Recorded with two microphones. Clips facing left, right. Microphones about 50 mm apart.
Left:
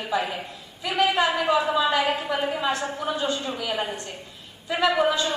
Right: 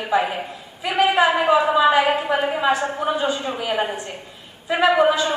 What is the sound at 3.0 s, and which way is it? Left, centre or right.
A woman's voice, centre.